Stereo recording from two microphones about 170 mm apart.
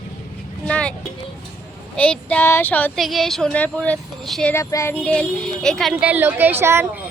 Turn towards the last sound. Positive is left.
turn(degrees=-15)  # may be behind; listen again after turning